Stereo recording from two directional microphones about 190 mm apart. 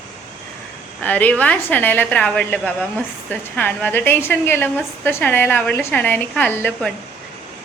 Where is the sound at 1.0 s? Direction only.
10° left (ahead or behind).